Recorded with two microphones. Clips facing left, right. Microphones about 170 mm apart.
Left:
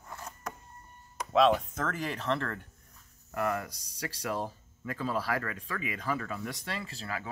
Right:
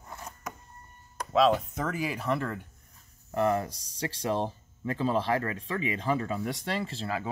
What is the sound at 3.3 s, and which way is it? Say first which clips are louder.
Speech: right 5 dB; 30° right (ahead or behind).